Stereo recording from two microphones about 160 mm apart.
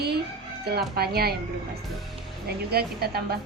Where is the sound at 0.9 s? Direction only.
75° right (ahead or behind).